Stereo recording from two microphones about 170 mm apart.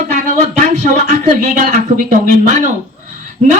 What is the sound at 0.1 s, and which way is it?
Speech, 45° right (ahead or behind).